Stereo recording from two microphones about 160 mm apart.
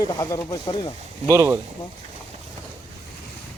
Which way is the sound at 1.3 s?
20° right (ahead or behind).